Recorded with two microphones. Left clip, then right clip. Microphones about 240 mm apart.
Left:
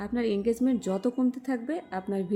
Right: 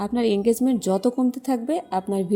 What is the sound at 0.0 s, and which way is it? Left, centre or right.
A woman's voice, centre.